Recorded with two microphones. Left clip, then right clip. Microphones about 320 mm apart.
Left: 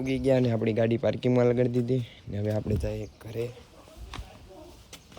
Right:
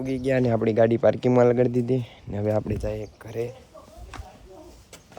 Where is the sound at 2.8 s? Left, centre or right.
Centre.